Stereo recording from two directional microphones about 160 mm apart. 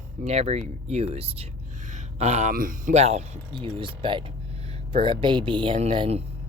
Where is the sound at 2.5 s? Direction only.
55° right (ahead or behind).